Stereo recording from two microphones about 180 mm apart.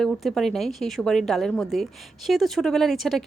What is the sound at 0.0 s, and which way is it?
Speech, centre (ahead or behind).